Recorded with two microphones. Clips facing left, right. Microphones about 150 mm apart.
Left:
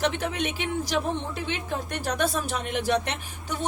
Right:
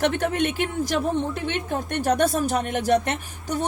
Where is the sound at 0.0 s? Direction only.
50° right (ahead or behind).